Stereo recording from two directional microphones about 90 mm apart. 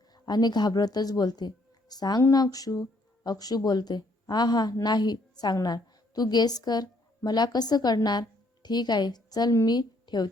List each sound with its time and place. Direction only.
0.1 s a woman's voice: 50° left (ahead or behind)